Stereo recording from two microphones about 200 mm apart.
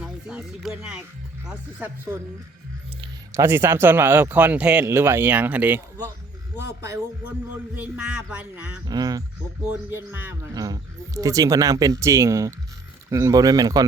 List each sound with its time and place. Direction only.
0.0 s speech: 5° right (ahead or behind)
3.3 s speech: 10° right (ahead or behind)
8.9 s speech: 20° right (ahead or behind)